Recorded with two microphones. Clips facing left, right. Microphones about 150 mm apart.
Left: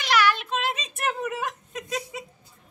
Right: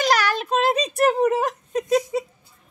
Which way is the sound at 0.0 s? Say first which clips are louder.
Right 2 dB; 40° right (ahead or behind).